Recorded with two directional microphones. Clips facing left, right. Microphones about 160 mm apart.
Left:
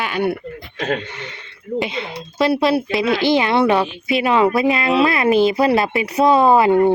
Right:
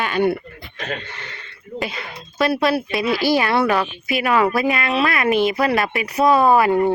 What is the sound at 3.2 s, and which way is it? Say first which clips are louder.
Speech: left 2 dB; 20° left (ahead or behind).